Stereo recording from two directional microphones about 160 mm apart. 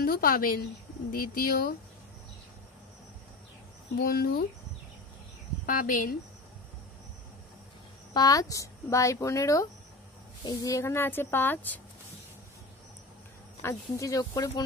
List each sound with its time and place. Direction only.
0.0 s a woman's voice: 65° left (ahead or behind)
4.0 s speech: 70° left (ahead or behind)
5.7 s a woman's voice: 60° left (ahead or behind)
8.1 s speech: 25° left (ahead or behind)
13.6 s speech: 20° left (ahead or behind)